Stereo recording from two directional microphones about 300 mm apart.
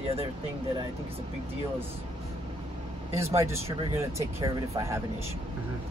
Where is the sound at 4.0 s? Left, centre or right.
Centre.